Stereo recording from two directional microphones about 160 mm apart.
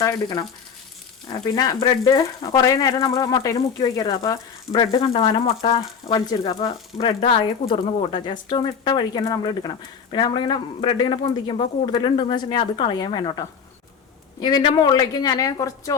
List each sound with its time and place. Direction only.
0.0 s speech: 20° left (ahead or behind)
5.1 s speech: 35° left (ahead or behind)
6.1 s speech: 25° left (ahead or behind)
7.2 s speech: 35° left (ahead or behind); by 16.0 s 20° left (ahead or behind)